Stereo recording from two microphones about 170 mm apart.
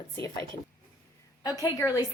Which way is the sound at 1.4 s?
20° left (ahead or behind).